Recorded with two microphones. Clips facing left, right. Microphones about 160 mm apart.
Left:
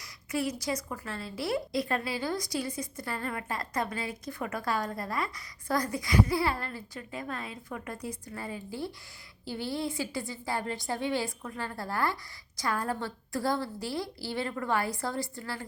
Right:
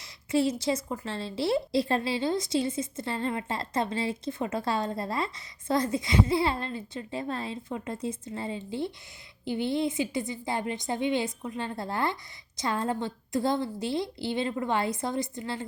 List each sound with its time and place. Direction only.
0.0 s a woman's voice: 25° right (ahead or behind)